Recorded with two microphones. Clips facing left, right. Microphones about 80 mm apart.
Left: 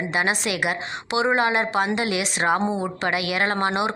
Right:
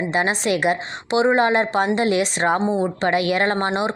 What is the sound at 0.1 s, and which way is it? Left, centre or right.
Speech, right.